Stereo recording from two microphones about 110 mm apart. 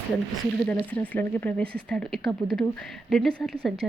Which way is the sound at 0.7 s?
15° left (ahead or behind).